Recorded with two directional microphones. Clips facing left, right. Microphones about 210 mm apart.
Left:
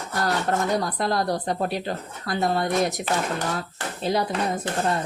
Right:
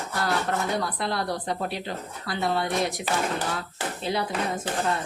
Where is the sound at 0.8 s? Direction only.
40° left (ahead or behind).